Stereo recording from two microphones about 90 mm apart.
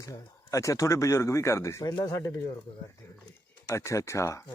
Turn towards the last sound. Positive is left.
turn(degrees=35)  # may be behind; listen again after turning